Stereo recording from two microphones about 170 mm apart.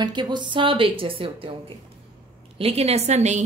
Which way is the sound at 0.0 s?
25° right (ahead or behind).